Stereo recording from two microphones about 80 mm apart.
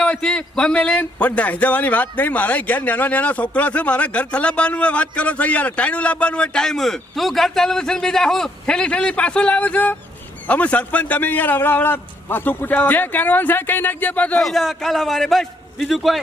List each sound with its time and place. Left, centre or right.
0.0 s a man's voice: centre
14.3 s a man's voice: centre